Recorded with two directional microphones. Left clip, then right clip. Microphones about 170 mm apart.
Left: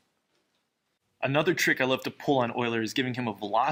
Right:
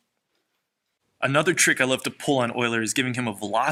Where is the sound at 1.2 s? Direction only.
55° right (ahead or behind).